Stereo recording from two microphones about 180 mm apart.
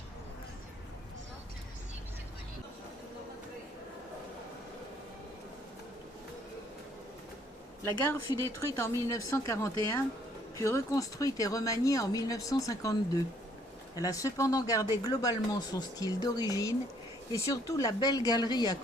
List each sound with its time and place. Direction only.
7.9 s speech: 15° left (ahead or behind)